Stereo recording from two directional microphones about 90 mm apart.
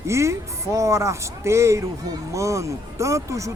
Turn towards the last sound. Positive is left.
turn(degrees=-35)  # may be behind; listen again after turning